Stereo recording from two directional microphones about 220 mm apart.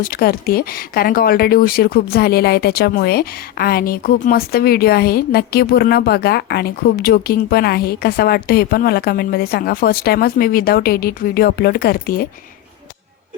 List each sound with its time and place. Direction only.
0.0 s speech: 40° left (ahead or behind)